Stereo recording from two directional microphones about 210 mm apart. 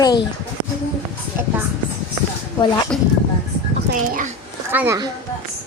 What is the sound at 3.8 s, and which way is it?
Speech, 40° right (ahead or behind).